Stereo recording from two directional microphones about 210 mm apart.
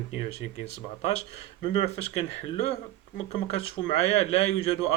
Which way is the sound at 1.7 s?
30° left (ahead or behind).